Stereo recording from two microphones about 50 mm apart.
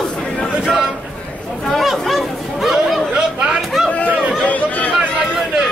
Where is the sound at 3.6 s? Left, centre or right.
Centre.